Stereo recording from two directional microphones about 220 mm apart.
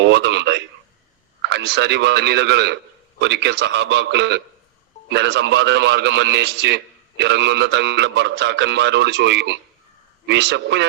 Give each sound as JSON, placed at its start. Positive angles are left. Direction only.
{"t": 0.0, "sound": "a man's voice", "side_deg": -50}